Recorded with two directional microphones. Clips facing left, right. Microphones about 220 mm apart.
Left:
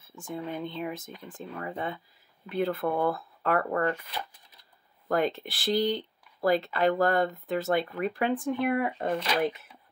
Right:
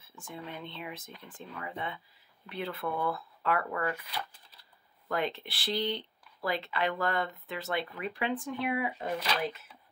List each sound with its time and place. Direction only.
0.3 s speech: 45° left (ahead or behind)
5.0 s speech: 45° left (ahead or behind)